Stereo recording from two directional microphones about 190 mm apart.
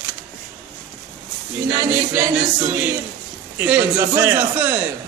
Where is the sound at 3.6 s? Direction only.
10° right (ahead or behind).